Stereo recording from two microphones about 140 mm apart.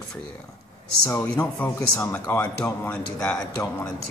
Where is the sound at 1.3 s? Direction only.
15° left (ahead or behind).